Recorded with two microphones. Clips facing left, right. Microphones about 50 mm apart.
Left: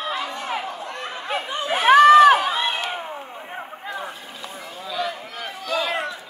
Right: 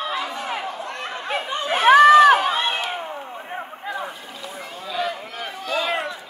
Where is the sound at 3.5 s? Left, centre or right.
Centre.